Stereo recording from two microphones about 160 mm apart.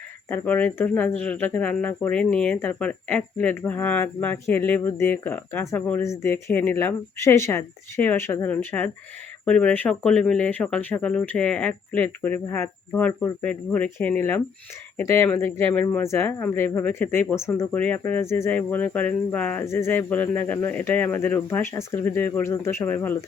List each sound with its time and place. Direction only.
0.3 s speech: 10° left (ahead or behind)